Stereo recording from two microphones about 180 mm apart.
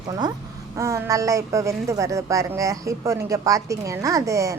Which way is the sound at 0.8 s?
15° right (ahead or behind).